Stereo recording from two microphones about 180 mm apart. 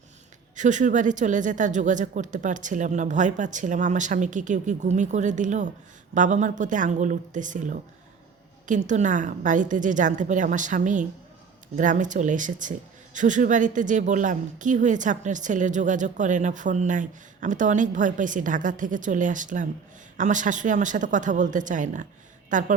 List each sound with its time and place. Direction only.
0.5 s a woman's voice: 45° right (ahead or behind)